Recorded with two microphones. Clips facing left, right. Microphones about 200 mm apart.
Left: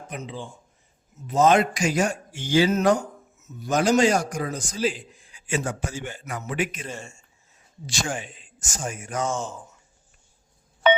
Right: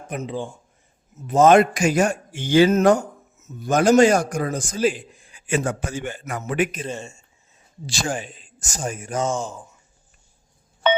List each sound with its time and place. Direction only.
0.1 s a man's voice: 50° right (ahead or behind)
6.8 s speech: 25° right (ahead or behind)
7.9 s a man's voice: 35° right (ahead or behind); by 9.6 s 15° right (ahead or behind)